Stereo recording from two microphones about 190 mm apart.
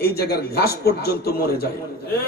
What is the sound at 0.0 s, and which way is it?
A man's voice, 55° left (ahead or behind).